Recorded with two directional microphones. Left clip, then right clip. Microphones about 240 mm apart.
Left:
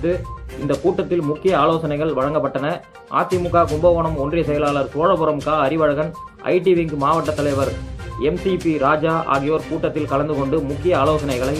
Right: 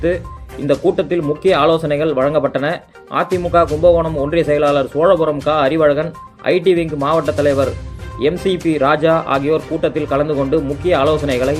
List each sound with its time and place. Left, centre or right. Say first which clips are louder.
0.7 s speech: right 4 dB; right
8.7 s speech: right 5 dB; right